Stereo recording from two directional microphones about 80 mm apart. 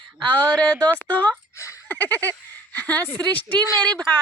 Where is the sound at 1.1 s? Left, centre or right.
Centre.